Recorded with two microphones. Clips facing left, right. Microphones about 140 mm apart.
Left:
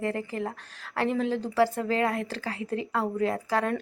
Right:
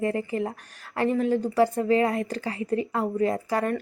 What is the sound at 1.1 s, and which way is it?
Speech, 90° left.